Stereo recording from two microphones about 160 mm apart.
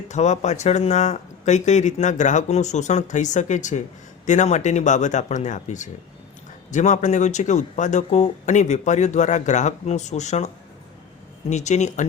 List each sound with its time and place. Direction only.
0.1 s speech: 45° left (ahead or behind)